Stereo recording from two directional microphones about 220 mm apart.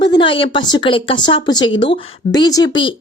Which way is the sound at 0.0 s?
20° left (ahead or behind).